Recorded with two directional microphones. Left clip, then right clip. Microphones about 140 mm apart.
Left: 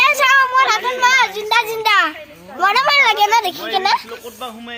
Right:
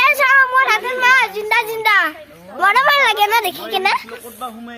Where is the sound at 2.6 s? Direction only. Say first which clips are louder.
Right 1 dB; 40° right (ahead or behind).